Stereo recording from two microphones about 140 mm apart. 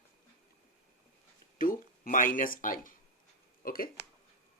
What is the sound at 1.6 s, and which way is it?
Speech, 80° left.